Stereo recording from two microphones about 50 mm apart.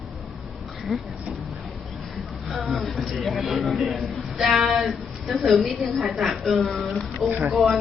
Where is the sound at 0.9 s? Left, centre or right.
Centre.